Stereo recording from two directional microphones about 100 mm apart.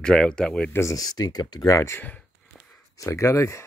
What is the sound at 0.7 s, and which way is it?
Speech, 35° left (ahead or behind).